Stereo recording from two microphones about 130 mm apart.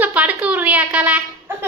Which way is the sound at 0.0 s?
10° right (ahead or behind).